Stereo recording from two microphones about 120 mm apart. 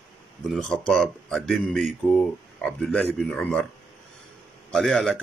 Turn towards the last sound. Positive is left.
turn(degrees=0)  # may be behind; listen again after turning